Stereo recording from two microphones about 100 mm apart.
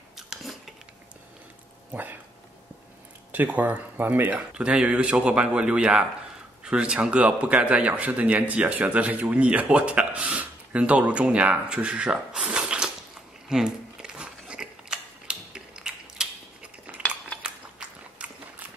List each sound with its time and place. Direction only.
1.9 s speech: 20° right (ahead or behind)
3.3 s a man's voice: 15° right (ahead or behind)
13.5 s a sound: 5° right (ahead or behind)
17.4 s biting: 10° right (ahead or behind)